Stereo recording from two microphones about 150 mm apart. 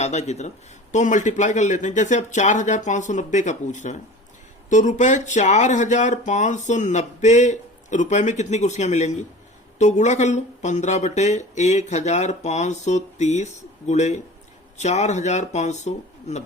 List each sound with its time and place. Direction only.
0.0 s speech: 45° left (ahead or behind)